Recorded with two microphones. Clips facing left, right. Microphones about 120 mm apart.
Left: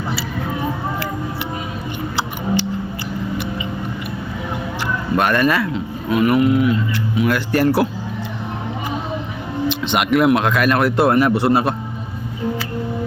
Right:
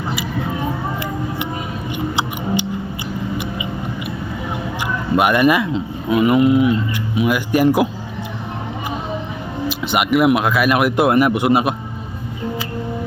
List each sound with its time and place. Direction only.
5.1 s speech: 15° right (ahead or behind)
9.6 s speech: 5° right (ahead or behind)